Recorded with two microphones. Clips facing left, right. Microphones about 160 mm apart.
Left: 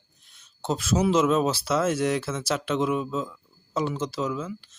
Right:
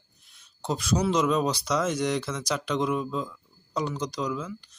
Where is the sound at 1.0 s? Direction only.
5° left (ahead or behind).